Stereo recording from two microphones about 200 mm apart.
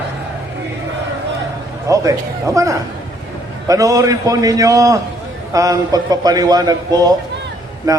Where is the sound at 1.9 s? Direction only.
15° right (ahead or behind).